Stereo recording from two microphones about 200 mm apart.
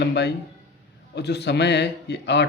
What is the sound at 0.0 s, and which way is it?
A man's voice, 60° left (ahead or behind).